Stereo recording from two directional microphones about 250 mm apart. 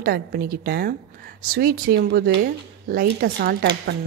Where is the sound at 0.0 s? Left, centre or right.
Right.